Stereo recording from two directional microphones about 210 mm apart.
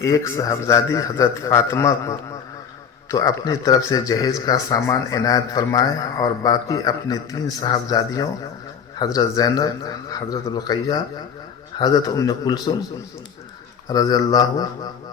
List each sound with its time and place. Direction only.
0.0 s a man's voice: 15° left (ahead or behind)
13.8 s speech: 15° left (ahead or behind)